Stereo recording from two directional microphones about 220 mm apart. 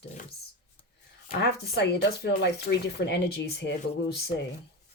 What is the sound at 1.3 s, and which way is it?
Speech, 45° left (ahead or behind).